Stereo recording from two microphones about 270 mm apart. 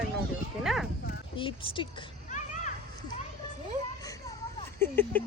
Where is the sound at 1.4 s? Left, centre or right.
Centre.